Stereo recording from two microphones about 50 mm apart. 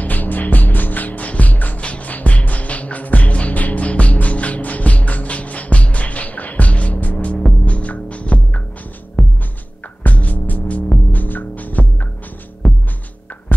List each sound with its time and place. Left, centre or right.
0.0 s music: left
12.6 s music: centre